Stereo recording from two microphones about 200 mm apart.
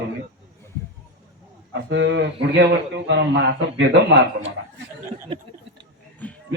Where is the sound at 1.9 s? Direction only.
65° right (ahead or behind).